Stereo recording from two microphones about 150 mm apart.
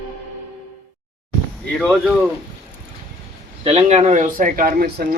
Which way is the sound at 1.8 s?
Centre (ahead or behind).